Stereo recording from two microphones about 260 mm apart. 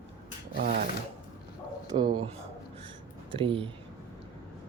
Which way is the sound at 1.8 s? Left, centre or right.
Centre.